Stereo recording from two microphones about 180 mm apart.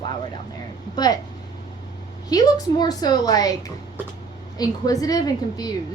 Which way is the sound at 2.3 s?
20° left (ahead or behind).